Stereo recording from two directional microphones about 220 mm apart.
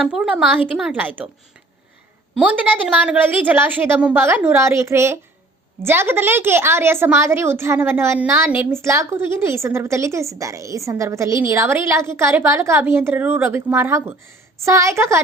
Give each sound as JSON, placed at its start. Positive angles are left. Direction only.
{"t": 0.1, "sound": "a woman's voice", "side_deg": -5}
{"t": 2.3, "sound": "a woman's voice", "side_deg": -5}